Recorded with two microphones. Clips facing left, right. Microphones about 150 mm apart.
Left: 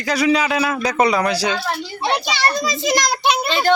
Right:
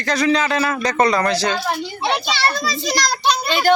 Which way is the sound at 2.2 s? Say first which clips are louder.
Even; 15° left (ahead or behind).